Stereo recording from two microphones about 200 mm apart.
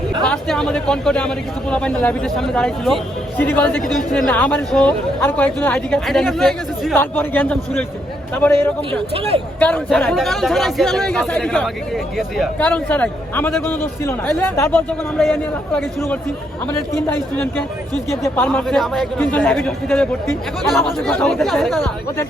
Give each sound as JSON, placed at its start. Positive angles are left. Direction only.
{"t": 0.3, "sound": "a man's voice", "side_deg": 5}
{"t": 8.9, "sound": "speech", "side_deg": -30}
{"t": 9.6, "sound": "a man's voice", "side_deg": 5}
{"t": 18.2, "sound": "a man's voice", "side_deg": 10}